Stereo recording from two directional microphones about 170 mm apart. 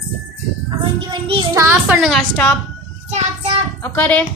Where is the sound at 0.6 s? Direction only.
30° right (ahead or behind).